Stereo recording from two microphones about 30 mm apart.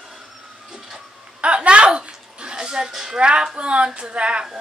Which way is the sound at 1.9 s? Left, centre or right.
Right.